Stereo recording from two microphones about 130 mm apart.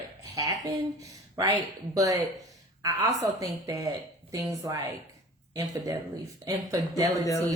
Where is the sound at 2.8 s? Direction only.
25° right (ahead or behind).